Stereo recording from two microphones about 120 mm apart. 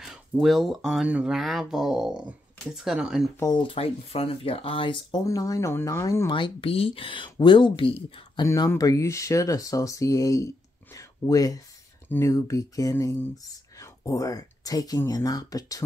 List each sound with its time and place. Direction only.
0.0 s speech: 5° right (ahead or behind)
3.5 s speech: 50° left (ahead or behind)
5.2 s speech: 30° left (ahead or behind)
6.3 s speech: 45° left (ahead or behind)
8.5 s speech: 30° left (ahead or behind)
12.9 s speech: 20° left (ahead or behind)
13.4 s speech: 30° left (ahead or behind)